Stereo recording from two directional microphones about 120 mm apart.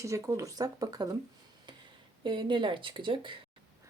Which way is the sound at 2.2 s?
40° right (ahead or behind).